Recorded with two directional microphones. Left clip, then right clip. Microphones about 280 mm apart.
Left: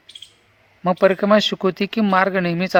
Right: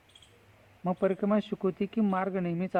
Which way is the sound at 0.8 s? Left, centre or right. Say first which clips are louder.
Left 13 dB; left.